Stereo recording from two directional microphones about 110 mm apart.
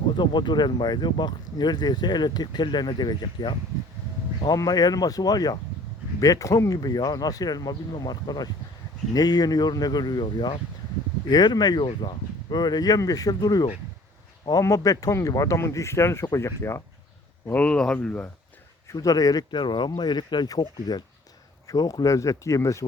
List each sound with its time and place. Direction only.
0.1 s speech: 45° left (ahead or behind); by 16.8 s 25° left (ahead or behind)
17.4 s speech: 15° left (ahead or behind)
18.9 s speech: 35° left (ahead or behind)